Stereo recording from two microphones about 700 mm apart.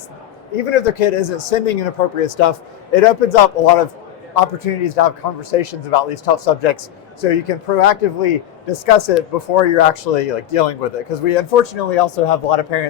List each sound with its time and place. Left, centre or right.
0.5 s speech: left
4.4 s a man's voice: left